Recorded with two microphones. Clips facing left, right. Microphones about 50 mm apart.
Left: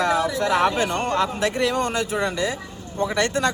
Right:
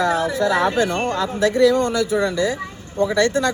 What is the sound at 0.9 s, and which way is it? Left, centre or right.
Speech, right.